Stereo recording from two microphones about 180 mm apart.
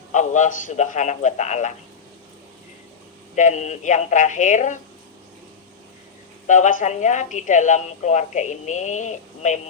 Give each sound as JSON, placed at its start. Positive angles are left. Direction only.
{"t": 0.1, "sound": "speech", "side_deg": 45}
{"t": 3.3, "sound": "speech", "side_deg": 40}
{"t": 6.5, "sound": "speech", "side_deg": 45}